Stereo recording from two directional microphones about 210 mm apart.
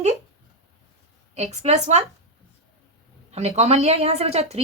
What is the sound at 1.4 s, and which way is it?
Speech, 30° right (ahead or behind).